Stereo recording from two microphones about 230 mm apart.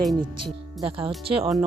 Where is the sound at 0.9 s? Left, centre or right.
Right.